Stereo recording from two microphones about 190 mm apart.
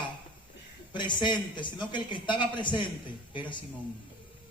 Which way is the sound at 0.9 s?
25° left (ahead or behind).